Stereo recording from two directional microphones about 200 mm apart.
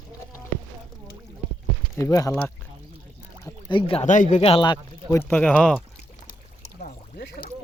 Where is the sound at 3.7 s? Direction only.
30° left (ahead or behind); by 5.8 s 5° left (ahead or behind).